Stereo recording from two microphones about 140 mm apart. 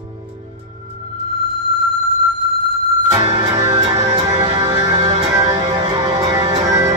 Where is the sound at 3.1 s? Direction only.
40° right (ahead or behind).